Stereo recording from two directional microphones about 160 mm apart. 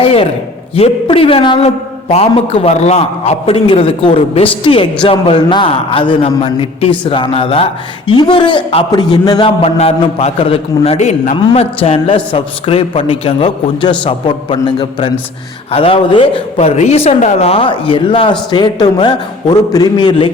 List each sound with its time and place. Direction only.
0.0 s a woman's voice: 35° left (ahead or behind)